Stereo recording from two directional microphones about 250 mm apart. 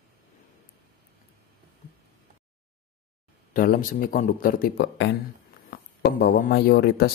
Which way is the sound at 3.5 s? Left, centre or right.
Left.